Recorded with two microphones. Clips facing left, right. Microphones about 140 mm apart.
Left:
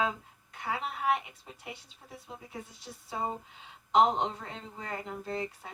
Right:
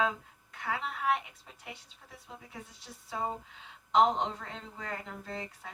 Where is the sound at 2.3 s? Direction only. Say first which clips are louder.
Left 3 dB; 20° left (ahead or behind).